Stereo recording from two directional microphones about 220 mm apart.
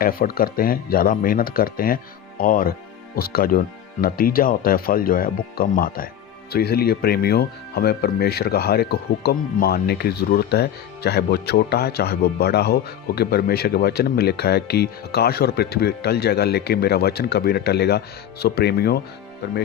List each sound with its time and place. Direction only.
0.0 s speech: 40° left (ahead or behind)